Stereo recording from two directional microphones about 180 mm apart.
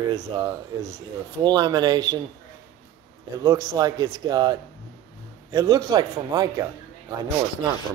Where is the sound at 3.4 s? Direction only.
20° right (ahead or behind).